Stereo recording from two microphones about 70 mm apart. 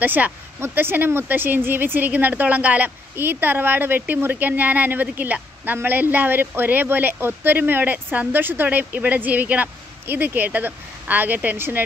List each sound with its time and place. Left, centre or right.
0.0 s a woman's voice: right